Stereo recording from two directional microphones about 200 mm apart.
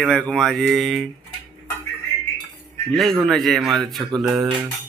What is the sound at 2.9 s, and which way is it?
Speech, centre (ahead or behind).